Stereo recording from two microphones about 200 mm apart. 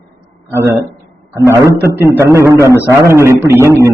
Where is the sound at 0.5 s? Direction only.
15° right (ahead or behind).